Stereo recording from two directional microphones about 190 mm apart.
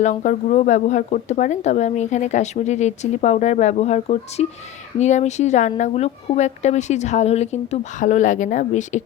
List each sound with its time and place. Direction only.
0.0 s speech: 40° left (ahead or behind)